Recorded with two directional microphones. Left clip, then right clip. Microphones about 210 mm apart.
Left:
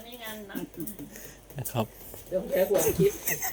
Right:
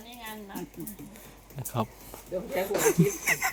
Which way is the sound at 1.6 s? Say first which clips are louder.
Even; 15° right (ahead or behind).